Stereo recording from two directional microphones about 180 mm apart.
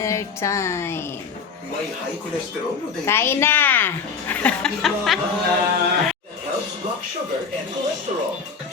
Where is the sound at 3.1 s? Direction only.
15° left (ahead or behind).